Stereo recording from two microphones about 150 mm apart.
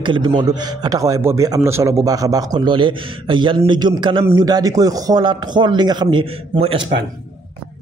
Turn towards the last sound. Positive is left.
turn(degrees=-35)  # may be behind; listen again after turning